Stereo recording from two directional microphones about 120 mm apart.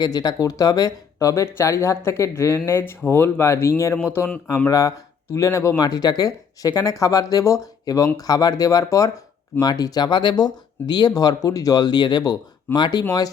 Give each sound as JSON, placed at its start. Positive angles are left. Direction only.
{"t": 0.0, "sound": "speech", "side_deg": 35}